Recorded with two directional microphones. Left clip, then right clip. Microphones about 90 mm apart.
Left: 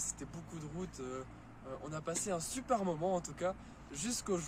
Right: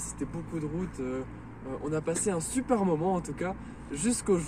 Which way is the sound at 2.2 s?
55° left (ahead or behind).